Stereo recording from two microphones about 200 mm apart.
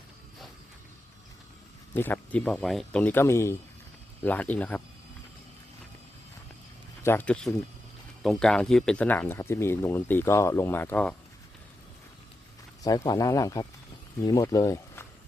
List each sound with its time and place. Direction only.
2.0 s speech: 10° left (ahead or behind)
7.0 s speech: 10° left (ahead or behind)
12.8 s speech: 20° left (ahead or behind)